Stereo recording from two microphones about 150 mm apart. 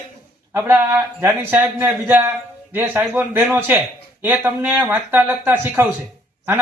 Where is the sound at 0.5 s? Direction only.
15° right (ahead or behind).